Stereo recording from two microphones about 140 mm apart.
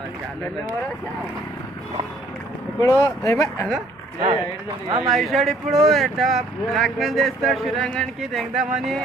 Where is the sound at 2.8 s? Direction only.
20° left (ahead or behind).